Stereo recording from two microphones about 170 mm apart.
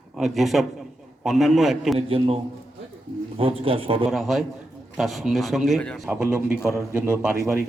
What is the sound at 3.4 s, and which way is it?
Speech, 35° right (ahead or behind).